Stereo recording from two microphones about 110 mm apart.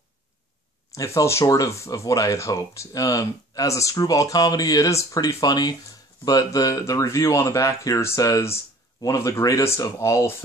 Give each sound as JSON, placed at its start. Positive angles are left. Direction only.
{"t": 0.9, "sound": "speech", "side_deg": 30}